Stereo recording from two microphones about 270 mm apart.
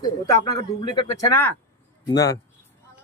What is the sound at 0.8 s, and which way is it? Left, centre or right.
Speech, centre.